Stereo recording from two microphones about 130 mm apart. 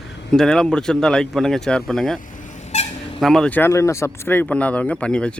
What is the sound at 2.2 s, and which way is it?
Vehicle, 85° left.